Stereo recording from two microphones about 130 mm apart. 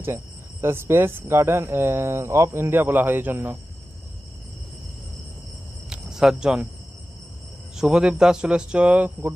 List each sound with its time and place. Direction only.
0.6 s speech: 20° right (ahead or behind)
5.9 s cricket: 5° right (ahead or behind)
7.8 s a man's voice: 5° right (ahead or behind)